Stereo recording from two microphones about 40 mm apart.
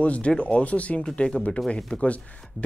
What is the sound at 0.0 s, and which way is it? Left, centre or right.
Speech, left.